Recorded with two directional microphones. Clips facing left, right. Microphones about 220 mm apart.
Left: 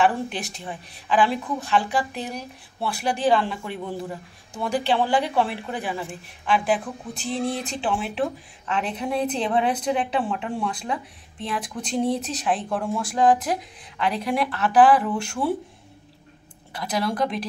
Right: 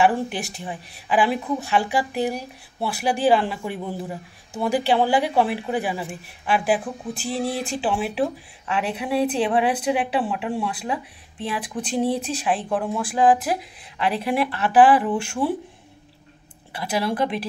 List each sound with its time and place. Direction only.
0.0 s speech: 10° right (ahead or behind)
16.7 s speech: 5° right (ahead or behind)